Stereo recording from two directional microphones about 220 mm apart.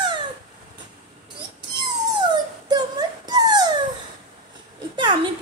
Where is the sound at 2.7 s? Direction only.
20° right (ahead or behind).